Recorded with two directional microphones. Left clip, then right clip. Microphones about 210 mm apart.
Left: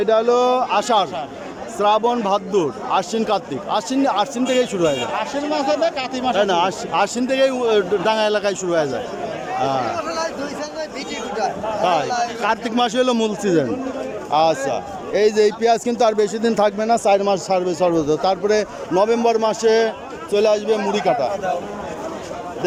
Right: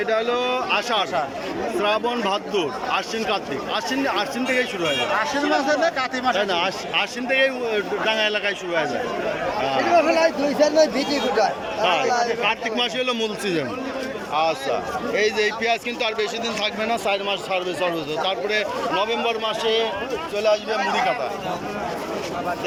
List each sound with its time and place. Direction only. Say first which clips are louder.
0.0 s speech: left 6 dB; 15° left (ahead or behind)
5.1 s speech: right 1 dB; 5° left (ahead or behind)
10.6 s speech: right 10 dB; 50° right (ahead or behind)
11.8 s speech: left 2 dB; 20° left (ahead or behind)
12.0 s speech: right 1 dB; centre (ahead or behind)
12.4 s speech: left 3 dB; 20° left (ahead or behind); by 16.7 s 35° left (ahead or behind)
16.8 s speech: left 5 dB; 20° left (ahead or behind)